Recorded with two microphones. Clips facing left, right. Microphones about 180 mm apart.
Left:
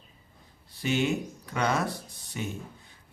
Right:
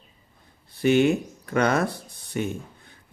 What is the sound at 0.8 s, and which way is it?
A man's voice, 55° right (ahead or behind).